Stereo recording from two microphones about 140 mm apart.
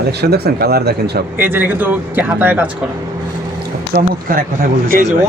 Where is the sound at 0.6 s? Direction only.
90° right.